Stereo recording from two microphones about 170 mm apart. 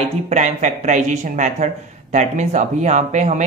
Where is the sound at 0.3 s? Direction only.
45° right (ahead or behind).